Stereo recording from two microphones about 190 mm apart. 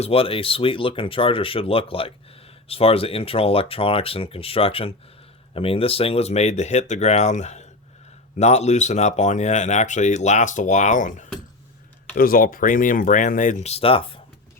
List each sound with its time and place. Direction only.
0.0 s speech: 30° left (ahead or behind)